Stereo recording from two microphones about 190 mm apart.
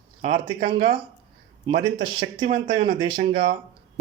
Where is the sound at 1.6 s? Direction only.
30° right (ahead or behind).